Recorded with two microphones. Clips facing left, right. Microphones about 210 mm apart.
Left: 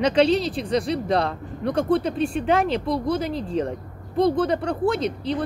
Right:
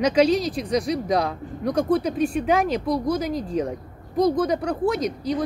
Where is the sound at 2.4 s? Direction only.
Centre (ahead or behind).